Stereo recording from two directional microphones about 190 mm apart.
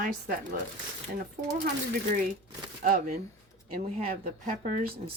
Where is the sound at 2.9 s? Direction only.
50° right (ahead or behind).